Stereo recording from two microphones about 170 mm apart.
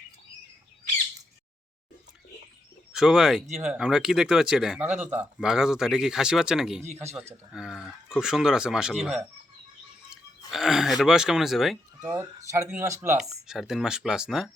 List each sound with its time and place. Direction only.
2.9 s speech: centre (ahead or behind)
6.8 s a man's voice: 40° right (ahead or behind)
7.1 s speech: 15° right (ahead or behind)
7.5 s speech: 5° right (ahead or behind)
10.1 s a sound: centre (ahead or behind)
12.1 s speech: 15° right (ahead or behind)
13.1 s speech: centre (ahead or behind)